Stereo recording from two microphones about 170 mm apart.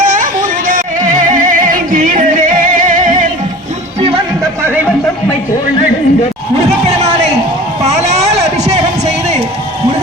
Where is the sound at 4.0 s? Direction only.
30° right (ahead or behind).